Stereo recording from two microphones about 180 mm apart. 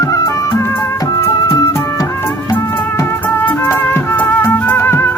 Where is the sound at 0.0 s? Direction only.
20° left (ahead or behind).